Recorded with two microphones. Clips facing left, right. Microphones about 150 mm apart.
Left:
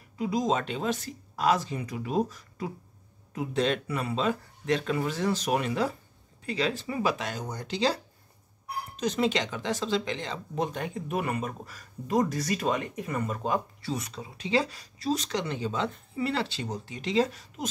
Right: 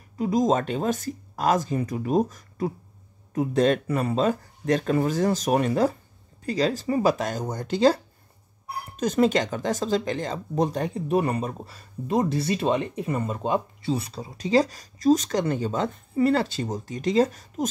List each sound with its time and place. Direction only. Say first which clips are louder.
0.2 s speech: right 5 dB; 45° right (ahead or behind)